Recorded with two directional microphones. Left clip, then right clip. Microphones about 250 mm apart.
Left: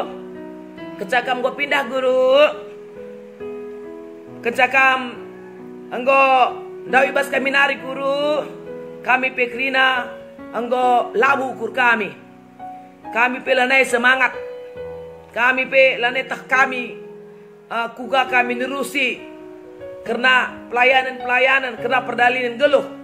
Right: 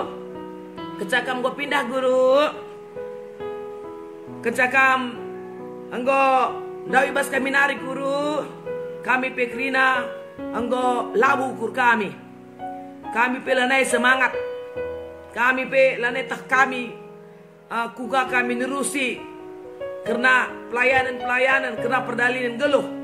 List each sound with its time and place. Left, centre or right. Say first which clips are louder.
0.9 s a man's voice: left 4 dB; centre
4.4 s a man's voice: left 3 dB; centre
13.1 s a man's voice: left 3 dB; centre
15.3 s a man's voice: left 4 dB; centre